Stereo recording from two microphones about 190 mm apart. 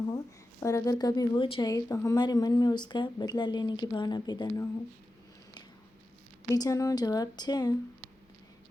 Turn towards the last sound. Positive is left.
turn(degrees=20)  # may be behind; listen again after turning